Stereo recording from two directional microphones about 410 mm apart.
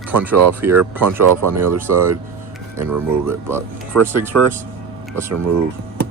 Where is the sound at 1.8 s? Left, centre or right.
Centre.